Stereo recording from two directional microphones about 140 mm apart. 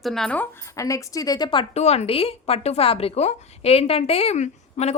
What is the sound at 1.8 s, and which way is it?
A woman's voice, 50° left (ahead or behind).